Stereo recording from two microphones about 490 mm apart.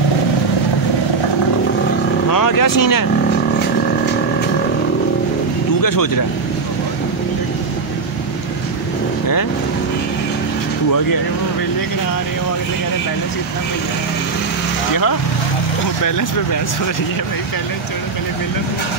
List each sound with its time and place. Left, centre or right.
2.3 s vehicle: left
5.8 s speech: left